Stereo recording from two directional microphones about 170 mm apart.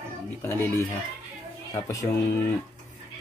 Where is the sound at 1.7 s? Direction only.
20° left (ahead or behind).